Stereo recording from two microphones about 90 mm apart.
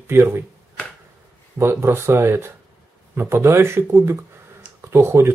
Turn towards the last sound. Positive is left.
turn(degrees=-30)  # may be behind; listen again after turning